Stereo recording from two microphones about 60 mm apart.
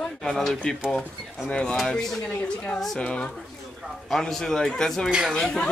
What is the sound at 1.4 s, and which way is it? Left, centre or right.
Speech, centre.